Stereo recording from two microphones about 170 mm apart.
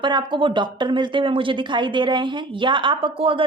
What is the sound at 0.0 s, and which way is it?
Speech, 30° right (ahead or behind).